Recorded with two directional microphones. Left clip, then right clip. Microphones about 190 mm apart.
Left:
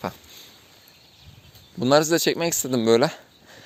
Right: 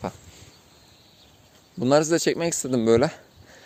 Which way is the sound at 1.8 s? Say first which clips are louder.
Left 1 dB; 5° right (ahead or behind).